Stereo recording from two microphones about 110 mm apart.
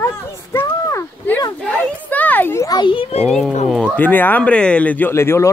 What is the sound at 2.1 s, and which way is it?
Speech, 15° left (ahead or behind).